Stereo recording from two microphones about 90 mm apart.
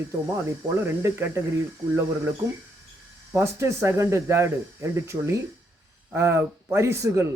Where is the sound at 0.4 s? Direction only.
30° right (ahead or behind).